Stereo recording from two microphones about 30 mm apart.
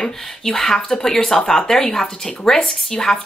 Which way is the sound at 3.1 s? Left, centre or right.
Left.